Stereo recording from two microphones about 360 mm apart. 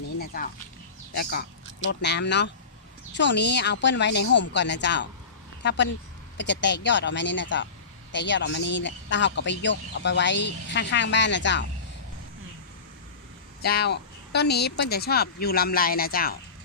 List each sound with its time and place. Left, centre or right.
0.3 s speech: left
13.6 s speech: left